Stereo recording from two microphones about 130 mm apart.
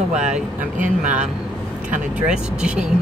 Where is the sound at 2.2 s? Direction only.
5° right (ahead or behind).